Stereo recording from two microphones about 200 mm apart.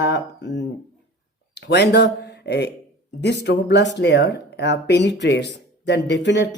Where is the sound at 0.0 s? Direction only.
60° left (ahead or behind).